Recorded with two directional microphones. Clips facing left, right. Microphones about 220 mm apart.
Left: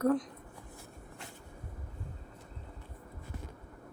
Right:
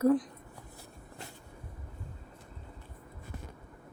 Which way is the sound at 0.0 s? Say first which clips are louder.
Right 3 dB; 5° right (ahead or behind).